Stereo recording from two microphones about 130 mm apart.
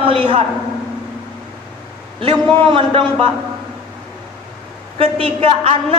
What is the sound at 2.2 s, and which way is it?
Speech, 50° right (ahead or behind).